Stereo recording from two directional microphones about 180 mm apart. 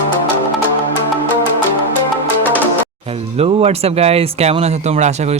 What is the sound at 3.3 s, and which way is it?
Speech, 35° right (ahead or behind).